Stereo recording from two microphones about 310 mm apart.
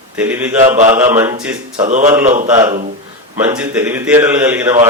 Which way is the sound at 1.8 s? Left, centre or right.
Right.